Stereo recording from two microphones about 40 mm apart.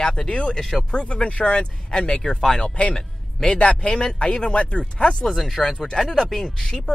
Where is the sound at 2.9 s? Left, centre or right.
Centre.